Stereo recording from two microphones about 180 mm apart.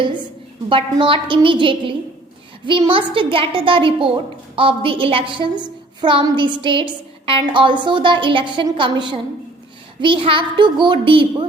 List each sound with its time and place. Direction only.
0.7 s a woman's voice: 30° right (ahead or behind)